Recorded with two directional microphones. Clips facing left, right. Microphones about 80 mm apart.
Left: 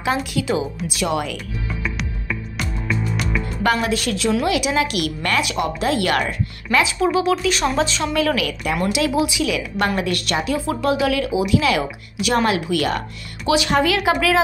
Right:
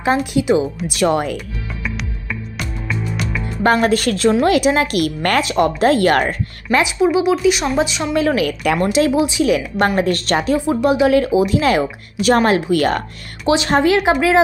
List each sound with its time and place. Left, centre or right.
0.2 s speech: right
0.8 s speech: right
1.1 s a woman's voice: right
1.8 s music: centre
3.6 s a woman's voice: right
6.8 s speech: centre
8.1 s a woman's voice: right
10.7 s a woman's voice: right